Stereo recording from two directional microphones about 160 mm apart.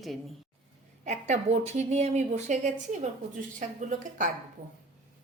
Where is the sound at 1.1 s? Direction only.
45° right (ahead or behind).